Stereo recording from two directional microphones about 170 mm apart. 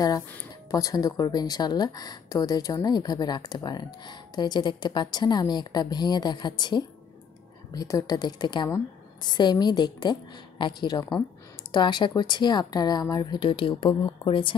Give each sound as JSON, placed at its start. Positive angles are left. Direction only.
{"t": 0.7, "sound": "speech", "side_deg": 20}